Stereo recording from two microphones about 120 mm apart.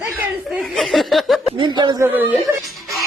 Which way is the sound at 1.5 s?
40° right (ahead or behind).